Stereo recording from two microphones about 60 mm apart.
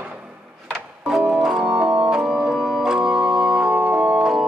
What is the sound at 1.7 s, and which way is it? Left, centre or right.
Music, centre.